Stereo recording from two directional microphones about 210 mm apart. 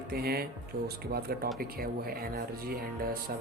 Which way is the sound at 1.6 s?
45° right (ahead or behind).